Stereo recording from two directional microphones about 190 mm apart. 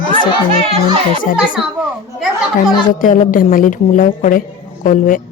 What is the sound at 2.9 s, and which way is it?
A woman's voice, 45° left (ahead or behind).